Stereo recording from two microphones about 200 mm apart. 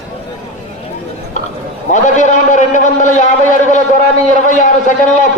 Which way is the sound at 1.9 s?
40° left (ahead or behind).